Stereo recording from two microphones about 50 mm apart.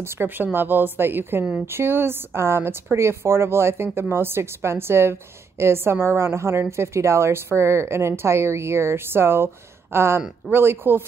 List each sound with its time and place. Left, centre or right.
0.0 s a woman's voice: right